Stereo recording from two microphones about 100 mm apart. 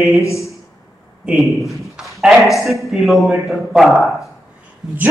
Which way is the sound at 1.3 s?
Centre (ahead or behind).